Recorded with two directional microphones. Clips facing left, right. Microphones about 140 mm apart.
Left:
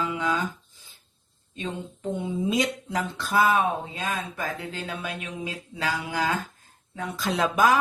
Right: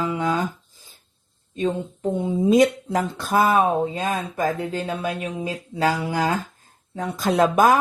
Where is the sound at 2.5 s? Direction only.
45° right (ahead or behind).